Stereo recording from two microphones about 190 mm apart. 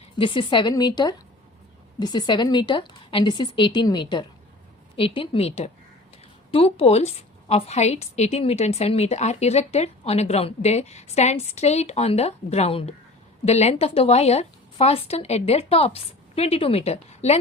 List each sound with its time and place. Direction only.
0.2 s a woman's voice: 25° left (ahead or behind)